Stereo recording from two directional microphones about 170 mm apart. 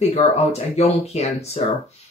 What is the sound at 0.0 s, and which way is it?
Speech, 40° left (ahead or behind).